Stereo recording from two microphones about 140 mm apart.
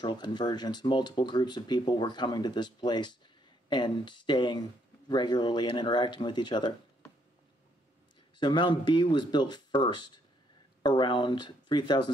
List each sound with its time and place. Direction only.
0.0 s speech: 30° left (ahead or behind)
8.4 s speech: 35° left (ahead or behind)